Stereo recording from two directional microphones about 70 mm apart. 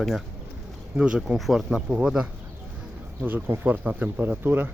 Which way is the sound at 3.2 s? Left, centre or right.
Right.